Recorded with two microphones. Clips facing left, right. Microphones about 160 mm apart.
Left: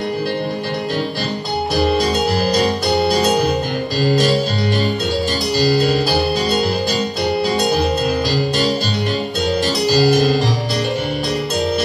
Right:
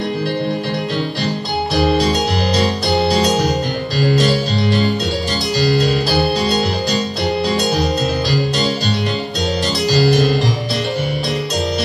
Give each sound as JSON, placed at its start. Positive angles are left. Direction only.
{"t": 9.9, "sound": "music", "side_deg": 40}